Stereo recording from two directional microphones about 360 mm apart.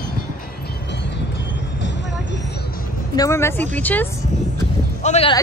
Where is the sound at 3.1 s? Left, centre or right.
Centre.